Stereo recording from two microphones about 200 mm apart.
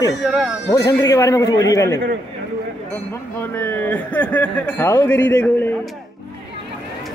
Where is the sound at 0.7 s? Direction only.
15° left (ahead or behind).